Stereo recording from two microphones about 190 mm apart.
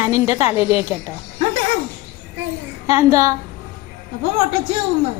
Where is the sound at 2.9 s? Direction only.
15° right (ahead or behind).